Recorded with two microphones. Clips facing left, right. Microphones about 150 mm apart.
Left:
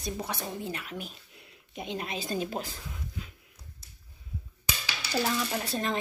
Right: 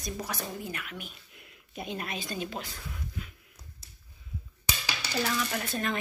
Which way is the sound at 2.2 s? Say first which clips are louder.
Left 4 dB; 40° left (ahead or behind).